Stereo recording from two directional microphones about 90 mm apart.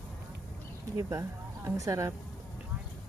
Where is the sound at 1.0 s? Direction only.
35° right (ahead or behind).